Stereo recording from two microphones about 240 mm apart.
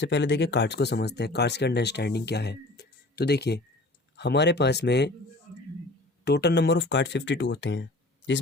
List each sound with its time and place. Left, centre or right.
0.0 s speech: left
6.2 s speech: left